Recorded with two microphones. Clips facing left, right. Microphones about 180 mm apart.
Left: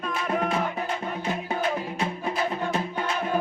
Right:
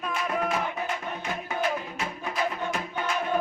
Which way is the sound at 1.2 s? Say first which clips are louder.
Left 1 dB; 30° left (ahead or behind).